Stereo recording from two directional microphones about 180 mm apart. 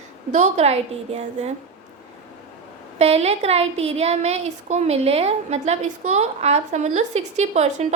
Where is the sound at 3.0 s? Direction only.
35° right (ahead or behind).